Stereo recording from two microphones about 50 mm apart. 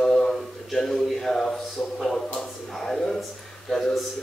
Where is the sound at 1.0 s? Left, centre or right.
Centre.